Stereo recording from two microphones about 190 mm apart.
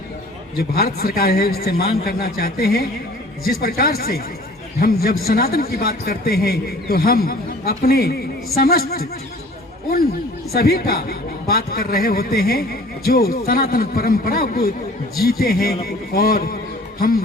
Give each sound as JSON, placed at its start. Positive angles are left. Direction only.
{"t": 0.5, "sound": "a man's voice", "side_deg": 55}
{"t": 10.5, "sound": "a man's voice", "side_deg": 55}